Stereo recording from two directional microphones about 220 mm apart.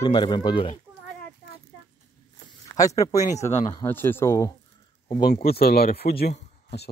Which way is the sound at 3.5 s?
30° left (ahead or behind).